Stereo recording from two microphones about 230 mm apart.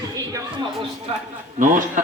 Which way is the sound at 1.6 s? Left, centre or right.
Right.